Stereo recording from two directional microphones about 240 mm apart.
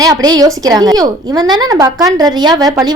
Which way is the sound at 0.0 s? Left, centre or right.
Centre.